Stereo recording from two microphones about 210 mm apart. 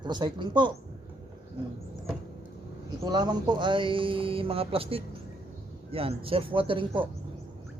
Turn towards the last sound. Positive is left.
turn(degrees=-25)  # may be behind; listen again after turning